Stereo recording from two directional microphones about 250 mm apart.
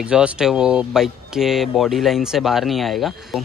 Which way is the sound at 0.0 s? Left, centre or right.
Centre.